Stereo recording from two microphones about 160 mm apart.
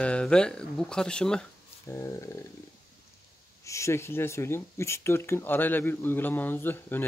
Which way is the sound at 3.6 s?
20° left (ahead or behind).